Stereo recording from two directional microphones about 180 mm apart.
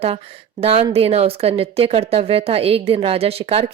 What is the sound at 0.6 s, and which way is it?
Speech, 35° right (ahead or behind).